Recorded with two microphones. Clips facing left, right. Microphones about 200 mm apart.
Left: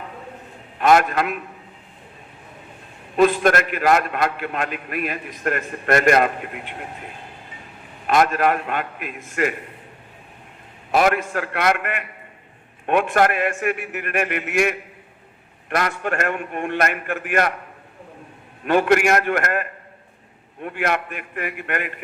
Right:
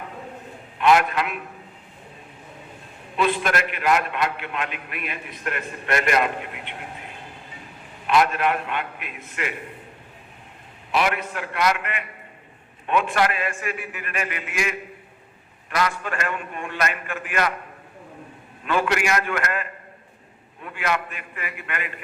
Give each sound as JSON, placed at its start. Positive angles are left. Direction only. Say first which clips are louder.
{"t": 0.8, "sound": "a man's voice", "louder": "left 2 dB", "side_deg": 45}
{"t": 3.2, "sound": "a man's voice", "louder": "left 6 dB", "side_deg": 45}
{"t": 8.0, "sound": "a man's voice", "louder": "left 2 dB", "side_deg": 45}
{"t": 10.9, "sound": "a man's voice", "louder": "left 5 dB", "side_deg": 45}
{"t": 11.5, "sound": "a man's voice", "louder": "left 1 dB", "side_deg": 55}
{"t": 18.6, "sound": "a man's voice", "louder": "left 6 dB", "side_deg": 50}